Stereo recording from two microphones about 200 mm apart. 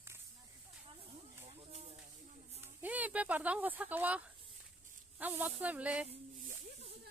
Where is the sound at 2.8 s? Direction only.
10° right (ahead or behind).